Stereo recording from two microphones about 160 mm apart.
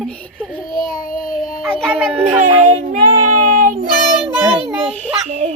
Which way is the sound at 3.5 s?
55° right (ahead or behind).